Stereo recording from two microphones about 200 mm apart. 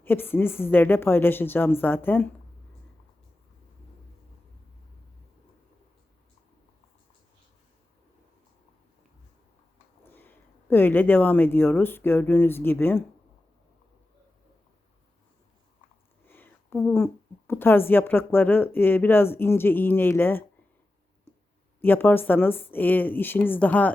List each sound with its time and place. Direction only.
0.0 s a woman's voice: 10° left (ahead or behind)
10.0 s speech: 10° left (ahead or behind)
16.2 s a woman's voice: 10° left (ahead or behind)
21.8 s a woman's voice: 10° left (ahead or behind)